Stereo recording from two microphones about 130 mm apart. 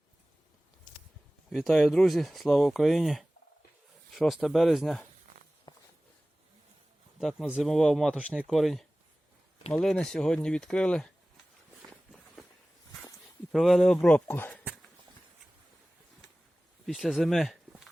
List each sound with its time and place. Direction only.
1.5 s speech: centre (ahead or behind)
5.7 s a sound: 30° left (ahead or behind)
7.2 s speech: centre (ahead or behind)
12.4 s walk: centre (ahead or behind)
13.5 s speech: centre (ahead or behind)
16.8 s speech: centre (ahead or behind)